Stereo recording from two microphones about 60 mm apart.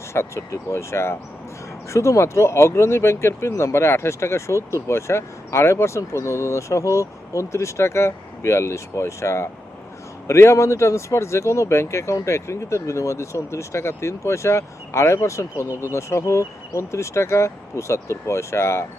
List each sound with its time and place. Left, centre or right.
0.1 s speech: left